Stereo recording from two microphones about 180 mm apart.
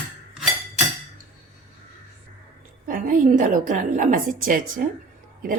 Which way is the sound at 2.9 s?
50° right (ahead or behind).